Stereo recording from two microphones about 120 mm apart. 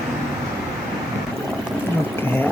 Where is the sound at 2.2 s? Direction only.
15° left (ahead or behind).